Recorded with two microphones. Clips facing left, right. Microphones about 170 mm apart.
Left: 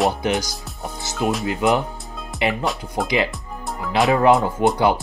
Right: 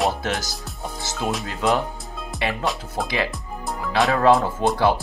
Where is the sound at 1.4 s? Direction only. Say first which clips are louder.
Left 2 dB; 20° left (ahead or behind).